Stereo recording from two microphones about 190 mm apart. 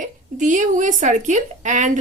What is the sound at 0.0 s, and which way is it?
A woman's voice, 40° right (ahead or behind).